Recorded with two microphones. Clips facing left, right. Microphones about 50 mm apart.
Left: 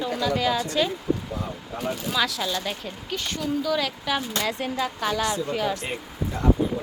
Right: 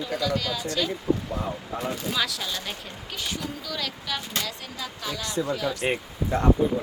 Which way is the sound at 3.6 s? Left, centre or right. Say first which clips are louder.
Left 8 dB; centre.